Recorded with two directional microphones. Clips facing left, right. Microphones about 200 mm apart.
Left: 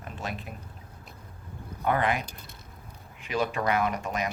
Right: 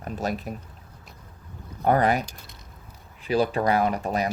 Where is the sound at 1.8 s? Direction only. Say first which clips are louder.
Right 5 dB; 40° right (ahead or behind).